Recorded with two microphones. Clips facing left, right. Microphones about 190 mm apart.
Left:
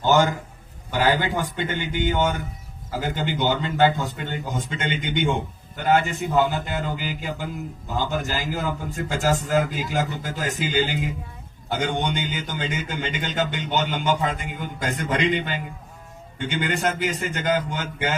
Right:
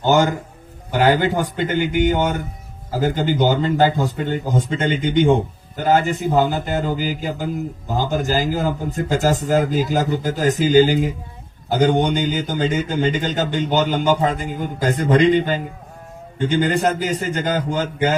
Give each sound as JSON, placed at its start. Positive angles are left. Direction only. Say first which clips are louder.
{"t": 1.0, "sound": "a man's voice", "louder": "right 6 dB", "side_deg": -40}